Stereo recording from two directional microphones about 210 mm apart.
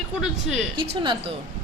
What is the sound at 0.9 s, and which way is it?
Speech, 25° right (ahead or behind).